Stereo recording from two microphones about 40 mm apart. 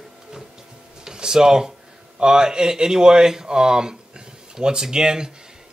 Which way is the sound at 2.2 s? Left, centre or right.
Centre.